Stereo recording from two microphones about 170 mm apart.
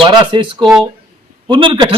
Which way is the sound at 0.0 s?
25° right (ahead or behind).